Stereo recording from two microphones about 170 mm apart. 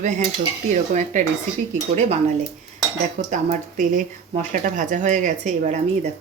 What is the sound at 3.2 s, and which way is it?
Speech, 45° right (ahead or behind).